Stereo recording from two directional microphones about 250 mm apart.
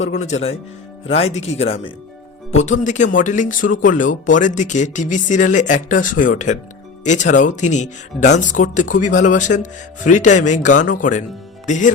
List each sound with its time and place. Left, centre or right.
0.2 s speech: left